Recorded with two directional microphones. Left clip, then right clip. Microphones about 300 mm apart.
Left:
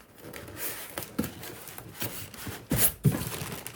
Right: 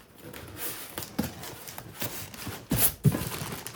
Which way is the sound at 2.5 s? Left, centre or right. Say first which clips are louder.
Even; centre.